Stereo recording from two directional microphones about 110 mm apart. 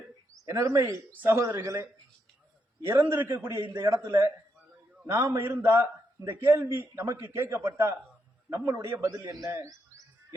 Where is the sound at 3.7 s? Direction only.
40° right (ahead or behind).